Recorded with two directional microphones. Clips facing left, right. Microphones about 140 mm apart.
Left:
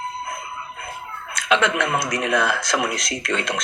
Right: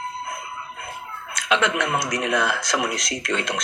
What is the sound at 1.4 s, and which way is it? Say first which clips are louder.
Speech: left 2 dB; 55° left (ahead or behind).